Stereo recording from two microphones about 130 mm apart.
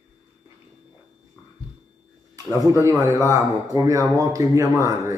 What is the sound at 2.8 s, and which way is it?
Speech, 25° right (ahead or behind).